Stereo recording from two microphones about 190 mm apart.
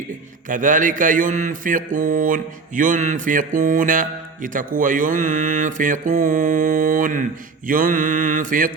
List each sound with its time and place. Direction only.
0.4 s mantra: 45° right (ahead or behind)